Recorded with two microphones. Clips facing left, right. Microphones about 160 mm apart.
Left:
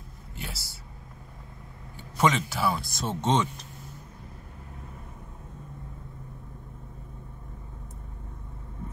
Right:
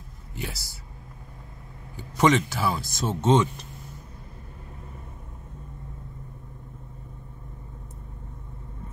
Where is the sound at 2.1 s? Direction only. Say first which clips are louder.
Right 4 dB; centre (ahead or behind).